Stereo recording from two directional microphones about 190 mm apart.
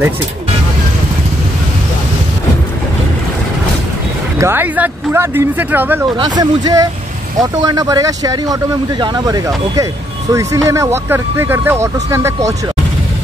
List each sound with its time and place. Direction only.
4.4 s speech: 10° right (ahead or behind)
6.1 s speech: 25° right (ahead or behind)